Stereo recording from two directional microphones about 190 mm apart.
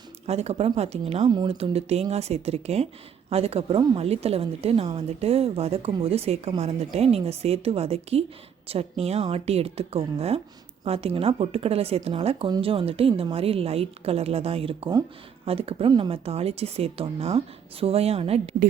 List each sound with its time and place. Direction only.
0.3 s a woman's voice: 35° right (ahead or behind)